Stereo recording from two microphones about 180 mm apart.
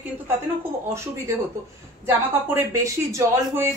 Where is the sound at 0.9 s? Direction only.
15° right (ahead or behind).